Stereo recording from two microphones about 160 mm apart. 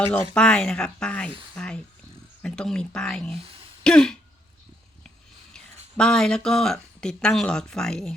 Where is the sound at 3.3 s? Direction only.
35° right (ahead or behind).